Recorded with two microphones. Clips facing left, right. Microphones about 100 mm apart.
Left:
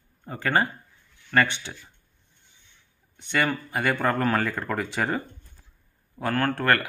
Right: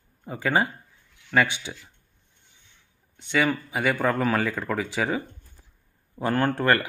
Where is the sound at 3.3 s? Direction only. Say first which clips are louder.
Right 1 dB; centre (ahead or behind).